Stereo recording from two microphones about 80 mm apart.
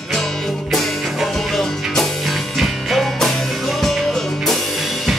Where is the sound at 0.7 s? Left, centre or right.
Centre.